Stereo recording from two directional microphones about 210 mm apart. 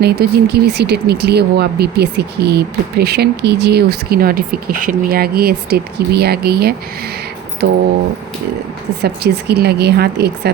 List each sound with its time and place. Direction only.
0.0 s speech: 50° right (ahead or behind)
9.0 s speech: 50° right (ahead or behind)